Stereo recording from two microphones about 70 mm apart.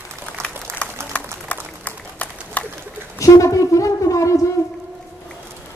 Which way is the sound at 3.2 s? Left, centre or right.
Left.